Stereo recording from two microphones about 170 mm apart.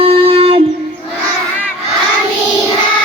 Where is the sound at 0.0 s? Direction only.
35° right (ahead or behind).